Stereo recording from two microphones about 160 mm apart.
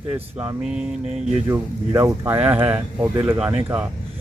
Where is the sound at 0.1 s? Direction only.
10° right (ahead or behind).